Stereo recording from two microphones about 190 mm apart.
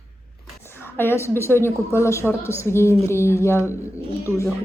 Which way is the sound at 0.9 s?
10° left (ahead or behind).